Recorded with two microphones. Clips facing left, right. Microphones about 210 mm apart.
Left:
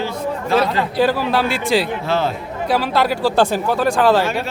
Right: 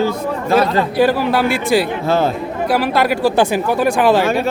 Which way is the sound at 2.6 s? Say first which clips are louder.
Right 2 dB; 10° right (ahead or behind).